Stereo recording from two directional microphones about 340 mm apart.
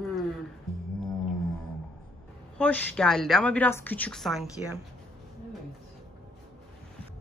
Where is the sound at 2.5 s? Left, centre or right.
Centre.